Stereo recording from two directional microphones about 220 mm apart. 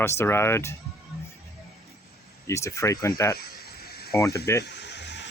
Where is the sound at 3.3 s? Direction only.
45° left (ahead or behind).